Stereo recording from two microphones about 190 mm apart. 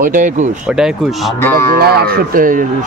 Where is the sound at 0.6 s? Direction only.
5° right (ahead or behind).